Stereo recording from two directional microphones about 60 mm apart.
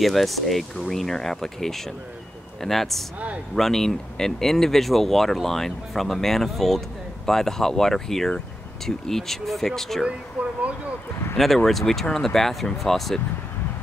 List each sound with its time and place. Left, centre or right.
0.0 s speech: centre
10.4 s speech: centre
11.3 s speech: centre